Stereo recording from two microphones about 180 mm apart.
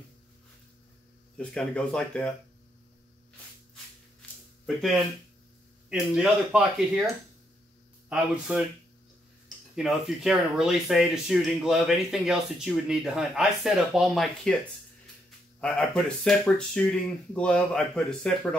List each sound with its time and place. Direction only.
1.4 s speech: 5° left (ahead or behind)
4.2 s a sound: 5° left (ahead or behind)
4.6 s speech: centre (ahead or behind)
8.1 s speech: 5° right (ahead or behind)
9.8 s speech: centre (ahead or behind)
15.6 s speech: 5° left (ahead or behind)